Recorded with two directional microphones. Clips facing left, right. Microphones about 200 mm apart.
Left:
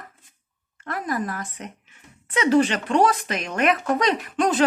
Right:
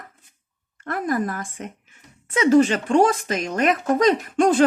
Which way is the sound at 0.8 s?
50° right (ahead or behind).